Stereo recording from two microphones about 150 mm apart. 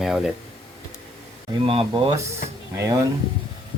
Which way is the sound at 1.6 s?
35° right (ahead or behind).